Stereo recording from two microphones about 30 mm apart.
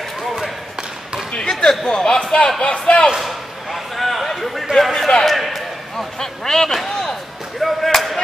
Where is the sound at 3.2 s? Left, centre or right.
Centre.